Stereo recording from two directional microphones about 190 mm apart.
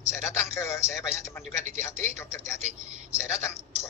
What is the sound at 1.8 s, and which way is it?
A woman's voice, 15° left (ahead or behind).